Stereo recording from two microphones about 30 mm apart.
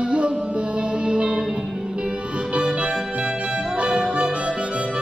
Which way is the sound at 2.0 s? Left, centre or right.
Right.